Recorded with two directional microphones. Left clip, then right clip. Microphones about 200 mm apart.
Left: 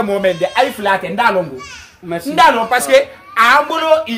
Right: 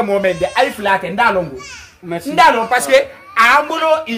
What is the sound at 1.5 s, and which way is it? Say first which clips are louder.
Speech: left 1 dB; 55° right (ahead or behind).